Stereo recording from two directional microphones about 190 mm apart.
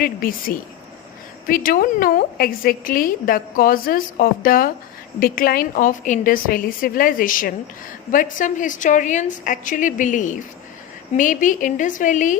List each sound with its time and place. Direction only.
0.0 s a woman's voice: 50° left (ahead or behind)